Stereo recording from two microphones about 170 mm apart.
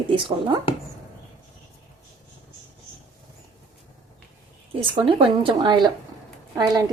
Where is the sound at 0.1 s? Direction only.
25° right (ahead or behind).